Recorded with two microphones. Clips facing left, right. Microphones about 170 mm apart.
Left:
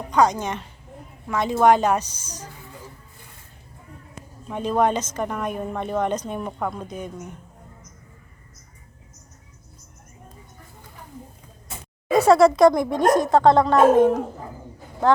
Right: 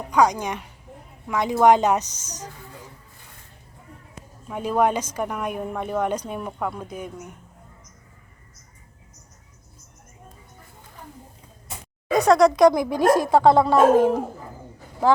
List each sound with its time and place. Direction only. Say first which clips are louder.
0.1 s a woman's voice: even; 10° right (ahead or behind)
4.4 s a woman's voice: even; 5° right (ahead or behind)
12.1 s speech: left 2 dB; 5° left (ahead or behind)